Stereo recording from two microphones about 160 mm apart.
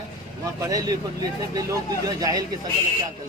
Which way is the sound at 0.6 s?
20° right (ahead or behind).